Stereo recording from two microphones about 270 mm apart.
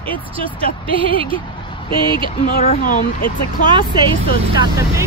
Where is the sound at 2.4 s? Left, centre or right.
Left.